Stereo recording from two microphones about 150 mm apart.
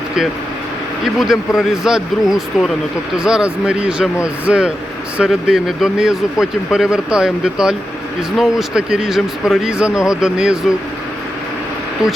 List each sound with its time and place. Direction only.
1.0 s speech: centre (ahead or behind)